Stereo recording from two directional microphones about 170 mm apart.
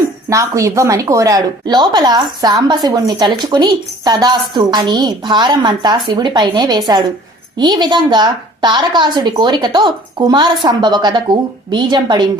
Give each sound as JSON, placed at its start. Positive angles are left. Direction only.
{"t": 0.3, "sound": "a woman's voice", "side_deg": -20}